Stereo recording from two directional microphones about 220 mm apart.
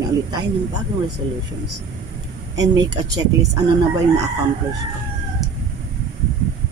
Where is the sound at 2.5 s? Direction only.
15° right (ahead or behind).